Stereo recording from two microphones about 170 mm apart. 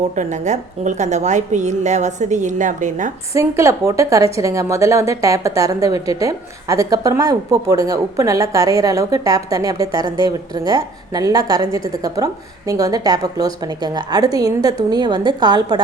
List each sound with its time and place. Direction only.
0.0 s a woman's voice: 45° right (ahead or behind)
3.3 s a woman's voice: 15° right (ahead or behind)